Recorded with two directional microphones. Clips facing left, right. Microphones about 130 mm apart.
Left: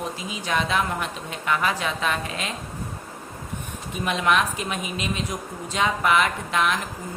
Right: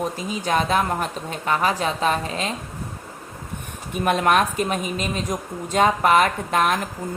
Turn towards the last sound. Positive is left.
turn(degrees=-45)  # may be behind; listen again after turning